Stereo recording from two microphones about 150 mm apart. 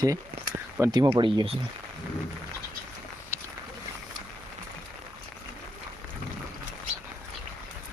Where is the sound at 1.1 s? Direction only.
35° right (ahead or behind).